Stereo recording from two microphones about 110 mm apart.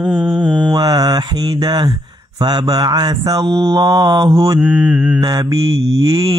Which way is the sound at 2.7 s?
35° right (ahead or behind).